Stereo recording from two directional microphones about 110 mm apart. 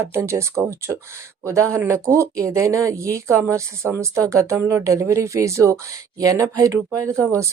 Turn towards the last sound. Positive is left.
turn(degrees=-25)  # may be behind; listen again after turning